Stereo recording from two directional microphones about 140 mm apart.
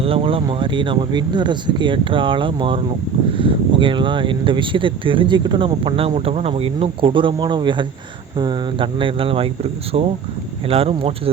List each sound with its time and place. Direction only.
0.0 s speech: 40° right (ahead or behind)